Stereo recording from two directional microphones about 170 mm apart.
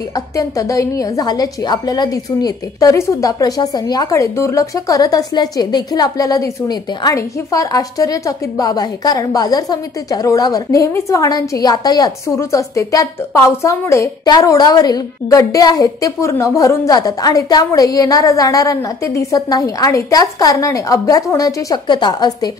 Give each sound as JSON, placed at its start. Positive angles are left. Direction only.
{"t": 0.1, "sound": "a woman's voice", "side_deg": 20}